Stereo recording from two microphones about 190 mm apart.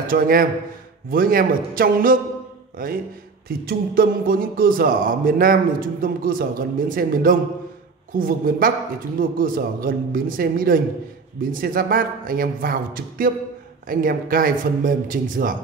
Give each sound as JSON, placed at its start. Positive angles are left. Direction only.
{"t": 0.0, "sound": "a man's voice", "side_deg": -50}